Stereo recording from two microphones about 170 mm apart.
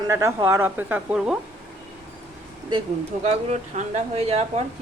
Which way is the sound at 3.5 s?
40° right (ahead or behind).